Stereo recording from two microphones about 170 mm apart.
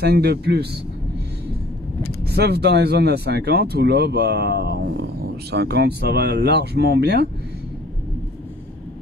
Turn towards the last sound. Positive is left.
turn(degrees=-70)  # may be behind; listen again after turning